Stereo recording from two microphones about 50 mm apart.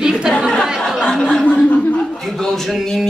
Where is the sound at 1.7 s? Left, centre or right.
Left.